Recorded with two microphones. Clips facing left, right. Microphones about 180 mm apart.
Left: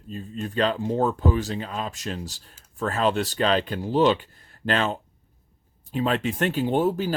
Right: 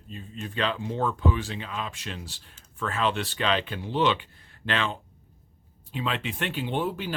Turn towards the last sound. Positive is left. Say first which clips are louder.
# left 7 dB
turn(degrees=40)  # may be behind; listen again after turning